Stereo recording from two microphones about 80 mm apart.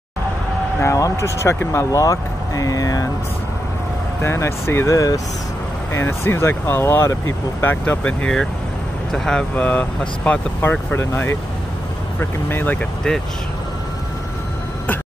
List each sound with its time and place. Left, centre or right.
0.7 s speech: left
4.2 s speech: left
4.9 s speech: left
5.9 s speech: left